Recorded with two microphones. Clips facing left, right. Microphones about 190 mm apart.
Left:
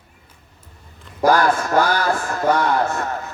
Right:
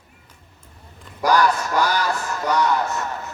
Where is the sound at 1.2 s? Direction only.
50° left (ahead or behind).